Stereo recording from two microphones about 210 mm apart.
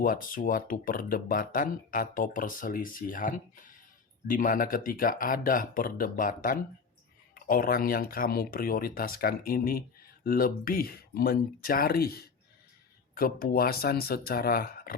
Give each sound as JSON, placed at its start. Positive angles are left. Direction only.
{"t": 0.0, "sound": "speech", "side_deg": 40}